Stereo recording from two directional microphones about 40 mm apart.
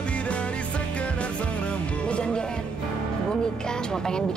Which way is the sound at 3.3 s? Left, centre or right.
Centre.